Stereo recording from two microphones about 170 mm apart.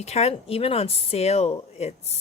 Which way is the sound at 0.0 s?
40° left (ahead or behind).